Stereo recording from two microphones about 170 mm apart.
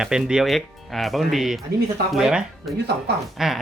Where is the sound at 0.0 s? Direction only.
5° right (ahead or behind).